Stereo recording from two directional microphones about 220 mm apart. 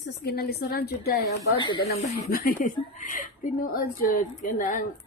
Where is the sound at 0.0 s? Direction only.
45° left (ahead or behind).